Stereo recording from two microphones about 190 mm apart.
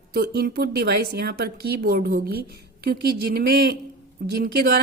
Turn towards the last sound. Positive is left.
turn(degrees=-55)  # may be behind; listen again after turning